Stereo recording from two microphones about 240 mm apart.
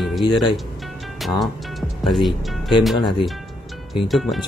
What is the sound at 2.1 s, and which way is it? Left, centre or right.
Speech, centre.